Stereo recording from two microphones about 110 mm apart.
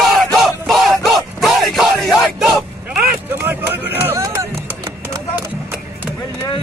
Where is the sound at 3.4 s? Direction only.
20° right (ahead or behind).